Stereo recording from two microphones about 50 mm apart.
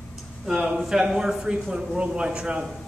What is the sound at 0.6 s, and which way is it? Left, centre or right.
Speech, centre.